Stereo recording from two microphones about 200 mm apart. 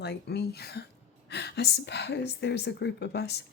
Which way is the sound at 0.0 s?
55° left (ahead or behind).